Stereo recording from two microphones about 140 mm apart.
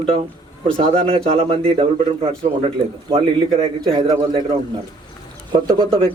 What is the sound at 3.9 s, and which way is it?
Speech, 45° right (ahead or behind).